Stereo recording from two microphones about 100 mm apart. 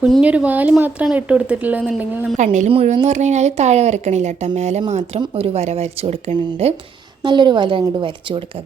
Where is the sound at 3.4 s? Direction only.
90° right.